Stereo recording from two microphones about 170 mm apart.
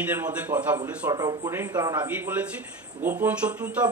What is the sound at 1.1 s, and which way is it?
A man's voice, 20° right (ahead or behind).